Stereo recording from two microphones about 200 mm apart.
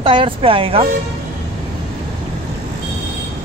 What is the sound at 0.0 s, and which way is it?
Speech, 25° right (ahead or behind).